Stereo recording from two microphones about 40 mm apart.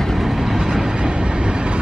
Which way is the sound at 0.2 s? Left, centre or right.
Centre.